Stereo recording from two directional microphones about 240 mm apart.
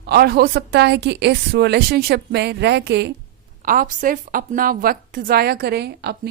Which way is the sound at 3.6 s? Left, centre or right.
Right.